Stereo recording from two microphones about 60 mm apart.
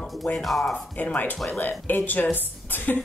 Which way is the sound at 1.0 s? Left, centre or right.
Left.